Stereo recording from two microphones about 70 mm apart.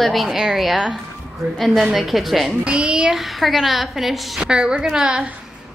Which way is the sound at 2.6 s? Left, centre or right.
Centre.